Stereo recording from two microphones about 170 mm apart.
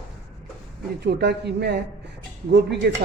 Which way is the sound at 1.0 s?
80° right.